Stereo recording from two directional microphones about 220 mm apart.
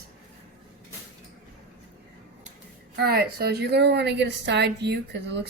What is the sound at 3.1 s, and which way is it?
A woman's voice, 45° right (ahead or behind).